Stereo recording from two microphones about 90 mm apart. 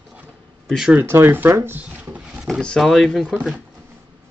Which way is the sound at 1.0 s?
25° right (ahead or behind).